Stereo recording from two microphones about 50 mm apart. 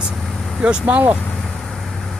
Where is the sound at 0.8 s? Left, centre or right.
Right.